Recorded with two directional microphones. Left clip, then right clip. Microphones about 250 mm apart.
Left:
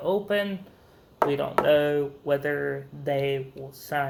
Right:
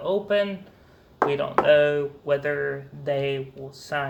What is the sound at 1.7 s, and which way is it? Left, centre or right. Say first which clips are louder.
Speech: right 4 dB; left.